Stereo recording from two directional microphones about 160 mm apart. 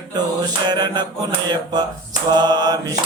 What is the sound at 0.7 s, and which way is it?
Mantra, 25° right (ahead or behind).